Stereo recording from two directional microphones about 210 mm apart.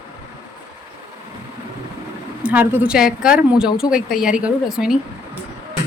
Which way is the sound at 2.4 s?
10° right (ahead or behind).